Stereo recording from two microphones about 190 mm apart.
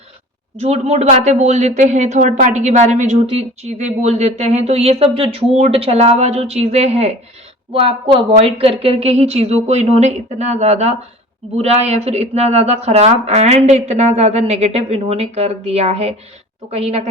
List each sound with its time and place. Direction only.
0.6 s a man's voice: 35° right (ahead or behind)